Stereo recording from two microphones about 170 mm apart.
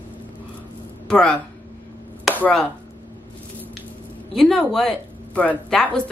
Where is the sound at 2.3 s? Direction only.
5° left (ahead or behind).